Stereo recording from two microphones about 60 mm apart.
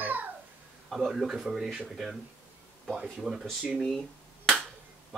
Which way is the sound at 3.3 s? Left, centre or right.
Centre.